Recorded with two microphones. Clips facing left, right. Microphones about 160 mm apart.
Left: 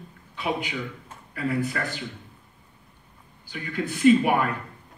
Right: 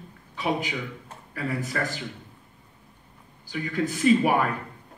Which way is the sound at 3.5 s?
45° right (ahead or behind).